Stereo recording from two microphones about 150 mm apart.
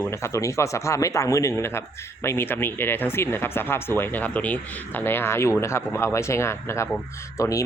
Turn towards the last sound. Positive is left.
turn(degrees=20)  # may be behind; listen again after turning